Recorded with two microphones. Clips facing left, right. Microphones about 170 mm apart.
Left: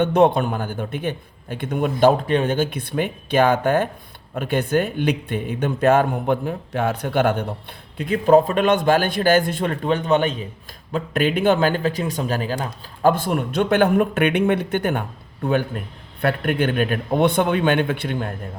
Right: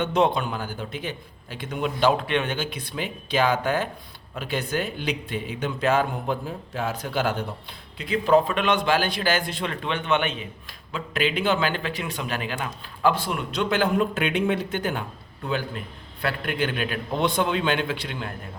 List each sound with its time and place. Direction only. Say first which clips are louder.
0.0 s speech: left 6 dB; 55° left (ahead or behind); by 10.4 s 40° left (ahead or behind)
10.9 s speech: left 5 dB; 50° left (ahead or behind)